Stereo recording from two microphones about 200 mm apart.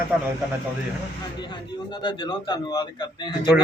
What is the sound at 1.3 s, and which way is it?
Speech, 20° left (ahead or behind).